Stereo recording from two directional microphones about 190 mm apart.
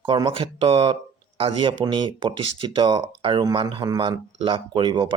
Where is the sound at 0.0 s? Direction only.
25° right (ahead or behind).